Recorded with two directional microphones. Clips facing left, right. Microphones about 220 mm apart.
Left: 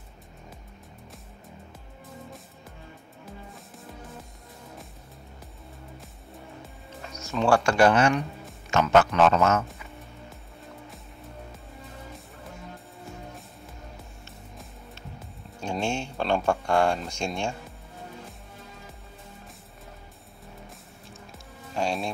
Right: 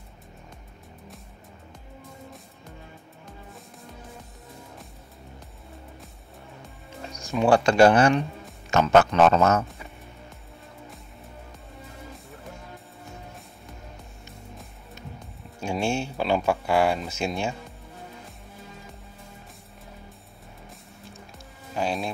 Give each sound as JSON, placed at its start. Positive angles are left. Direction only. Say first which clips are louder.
{"t": 7.2, "sound": "speech", "louder": "right 2 dB", "side_deg": -15}
{"t": 15.6, "sound": "speech", "louder": "right 3 dB", "side_deg": -10}
{"t": 21.7, "sound": "speech", "louder": "right 1 dB", "side_deg": 0}